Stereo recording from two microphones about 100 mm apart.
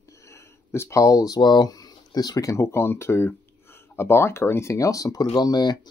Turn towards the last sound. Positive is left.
turn(degrees=45)  # may be behind; listen again after turning